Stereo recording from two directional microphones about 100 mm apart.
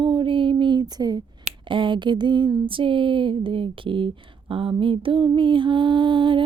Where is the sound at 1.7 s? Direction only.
55° right (ahead or behind).